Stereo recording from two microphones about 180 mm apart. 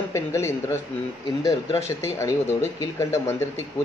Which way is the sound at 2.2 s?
15° left (ahead or behind).